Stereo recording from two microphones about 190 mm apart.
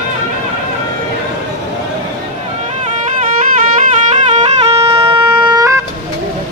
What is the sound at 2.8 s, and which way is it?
Music, 40° right (ahead or behind).